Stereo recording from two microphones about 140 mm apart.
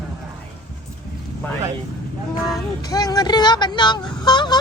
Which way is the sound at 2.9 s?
25° left (ahead or behind).